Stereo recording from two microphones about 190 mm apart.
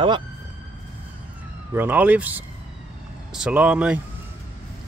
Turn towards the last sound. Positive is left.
turn(degrees=-5)  # may be behind; listen again after turning